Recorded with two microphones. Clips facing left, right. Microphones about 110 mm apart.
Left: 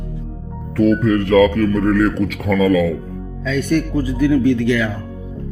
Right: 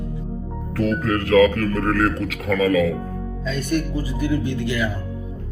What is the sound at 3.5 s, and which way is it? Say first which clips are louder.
A man's voice: left 6 dB; 90° left.